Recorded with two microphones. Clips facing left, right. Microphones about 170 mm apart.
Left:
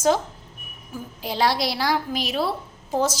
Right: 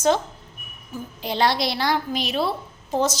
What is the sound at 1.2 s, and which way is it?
A woman's voice, 5° left (ahead or behind).